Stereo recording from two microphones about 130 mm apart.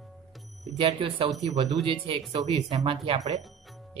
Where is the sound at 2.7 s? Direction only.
45° right (ahead or behind).